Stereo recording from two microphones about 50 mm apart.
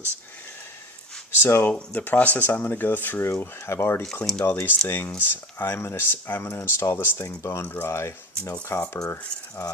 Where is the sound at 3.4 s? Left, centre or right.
Left.